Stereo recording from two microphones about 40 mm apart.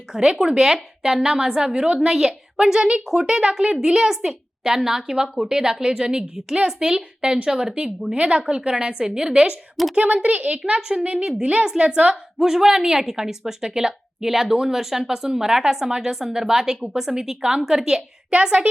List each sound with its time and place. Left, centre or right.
0.2 s a woman's voice: centre
9.9 s a woman's voice: right; by 11.9 s centre
11.9 s a woman's voice: right
12.4 s a woman's voice: centre
18.3 s a woman's voice: right